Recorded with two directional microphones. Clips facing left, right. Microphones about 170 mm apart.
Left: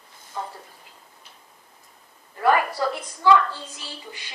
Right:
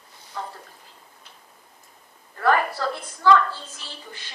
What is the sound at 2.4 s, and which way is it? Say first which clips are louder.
A woman's voice: left 1 dB; 15° left (ahead or behind).